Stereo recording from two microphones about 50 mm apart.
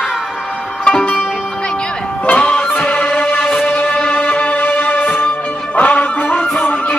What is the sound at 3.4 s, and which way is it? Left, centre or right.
Music, centre.